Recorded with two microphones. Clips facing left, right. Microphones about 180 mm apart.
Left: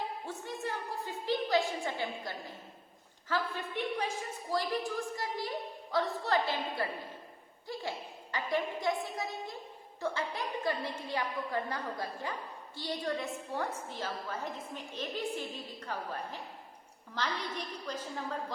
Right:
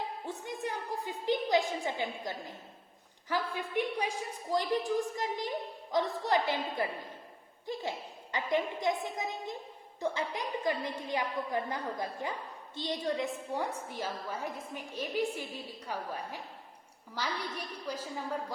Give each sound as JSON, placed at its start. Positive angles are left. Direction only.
{"t": 0.3, "sound": "a woman's voice", "side_deg": -15}